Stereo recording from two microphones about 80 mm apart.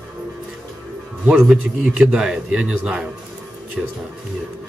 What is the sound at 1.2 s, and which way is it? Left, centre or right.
Speech, centre.